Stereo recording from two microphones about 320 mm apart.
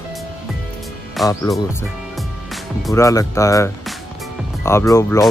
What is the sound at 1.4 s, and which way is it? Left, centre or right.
Speech, centre.